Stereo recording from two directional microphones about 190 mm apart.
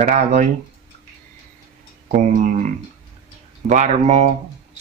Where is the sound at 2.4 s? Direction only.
45° right (ahead or behind).